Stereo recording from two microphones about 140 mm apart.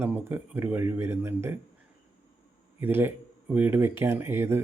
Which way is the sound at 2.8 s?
15° right (ahead or behind).